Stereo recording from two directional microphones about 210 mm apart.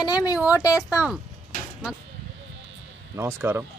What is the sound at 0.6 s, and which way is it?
Speech, 15° left (ahead or behind).